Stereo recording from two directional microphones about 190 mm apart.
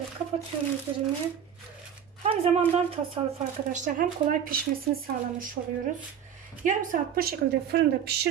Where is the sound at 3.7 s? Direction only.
45° right (ahead or behind).